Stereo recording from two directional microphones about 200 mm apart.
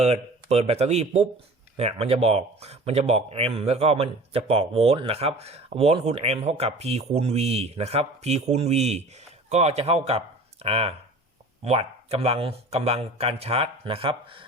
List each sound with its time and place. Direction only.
0.0 s speech: 30° right (ahead or behind)